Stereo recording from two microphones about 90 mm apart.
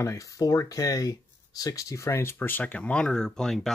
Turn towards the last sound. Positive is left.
turn(degrees=5)  # may be behind; listen again after turning